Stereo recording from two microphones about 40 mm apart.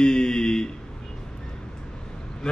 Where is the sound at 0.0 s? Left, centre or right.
Centre.